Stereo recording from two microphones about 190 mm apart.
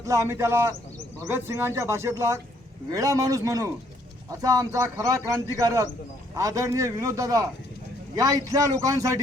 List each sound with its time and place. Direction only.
0.0 s a man's voice: 15° right (ahead or behind)